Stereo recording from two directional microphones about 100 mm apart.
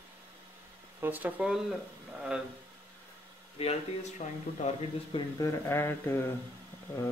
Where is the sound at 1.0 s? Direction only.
15° right (ahead or behind).